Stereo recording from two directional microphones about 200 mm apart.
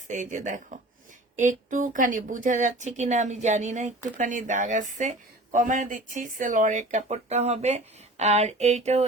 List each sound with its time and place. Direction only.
0.1 s speech: 40° right (ahead or behind)